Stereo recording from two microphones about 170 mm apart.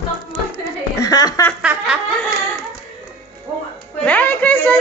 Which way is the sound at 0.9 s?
20° left (ahead or behind).